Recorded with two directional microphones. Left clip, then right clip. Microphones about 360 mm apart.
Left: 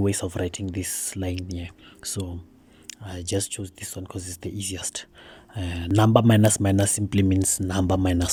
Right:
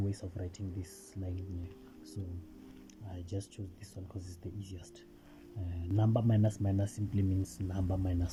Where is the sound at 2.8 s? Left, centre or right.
Left.